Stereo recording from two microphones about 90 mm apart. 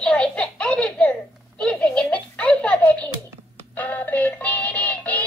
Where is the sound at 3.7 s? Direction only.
20° left (ahead or behind).